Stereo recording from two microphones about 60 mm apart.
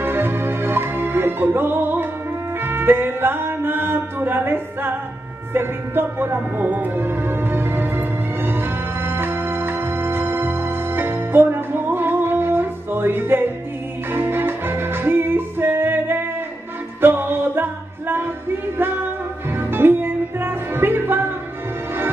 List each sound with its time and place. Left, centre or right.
0.0 s music: right
19.5 s music: right